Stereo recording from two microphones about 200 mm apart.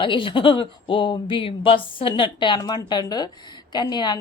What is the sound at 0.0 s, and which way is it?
A woman's voice, 25° left (ahead or behind).